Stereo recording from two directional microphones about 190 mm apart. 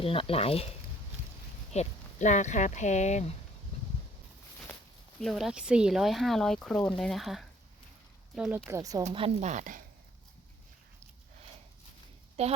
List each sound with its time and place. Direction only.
0.0 s speech: 30° left (ahead or behind)
1.7 s speech: 35° left (ahead or behind)
5.2 s speech: centre (ahead or behind); by 9.0 s 20° right (ahead or behind)
9.0 s a woman's voice: 35° right (ahead or behind)
12.4 s a woman's voice: 35° right (ahead or behind)